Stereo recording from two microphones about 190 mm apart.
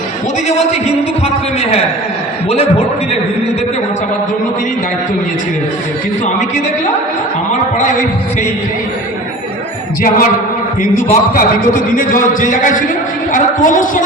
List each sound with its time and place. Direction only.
10.0 s a man's voice: 50° left (ahead or behind)